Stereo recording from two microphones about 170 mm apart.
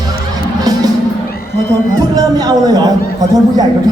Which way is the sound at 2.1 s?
25° right (ahead or behind).